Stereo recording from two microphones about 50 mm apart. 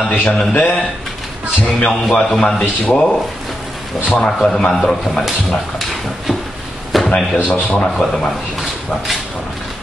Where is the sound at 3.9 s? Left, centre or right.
Centre.